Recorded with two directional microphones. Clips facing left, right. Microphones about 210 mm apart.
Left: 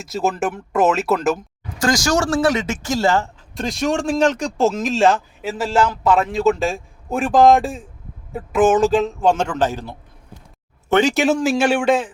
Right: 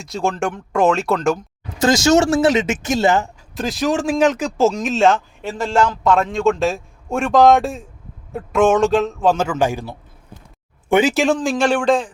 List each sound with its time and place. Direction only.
0.0 s speech: 5° left (ahead or behind)
1.8 s speech: 25° right (ahead or behind)
3.5 s speech: centre (ahead or behind)